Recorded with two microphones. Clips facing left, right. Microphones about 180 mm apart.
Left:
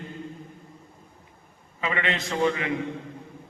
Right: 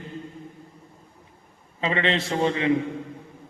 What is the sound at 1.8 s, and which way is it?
Speech, 30° right (ahead or behind).